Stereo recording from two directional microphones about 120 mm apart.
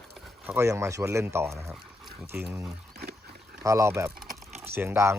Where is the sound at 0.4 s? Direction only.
20° right (ahead or behind).